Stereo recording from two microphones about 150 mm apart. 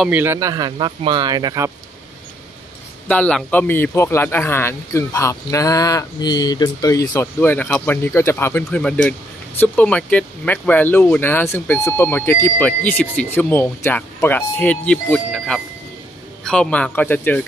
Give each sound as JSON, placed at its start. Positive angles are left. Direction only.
{"t": 0.1, "sound": "speech", "side_deg": -15}
{"t": 3.1, "sound": "speech", "side_deg": 5}
{"t": 8.8, "sound": "speech", "side_deg": 5}